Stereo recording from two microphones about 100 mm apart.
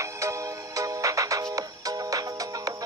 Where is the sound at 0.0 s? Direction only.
30° right (ahead or behind).